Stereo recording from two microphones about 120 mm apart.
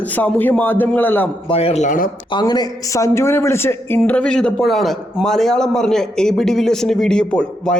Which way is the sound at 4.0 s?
10° left (ahead or behind).